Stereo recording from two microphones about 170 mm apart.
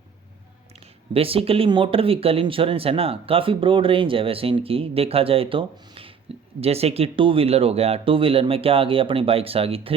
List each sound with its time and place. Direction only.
1.1 s speech: 35° right (ahead or behind)